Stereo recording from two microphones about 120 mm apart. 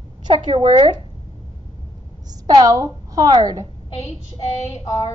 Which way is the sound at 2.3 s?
30° right (ahead or behind).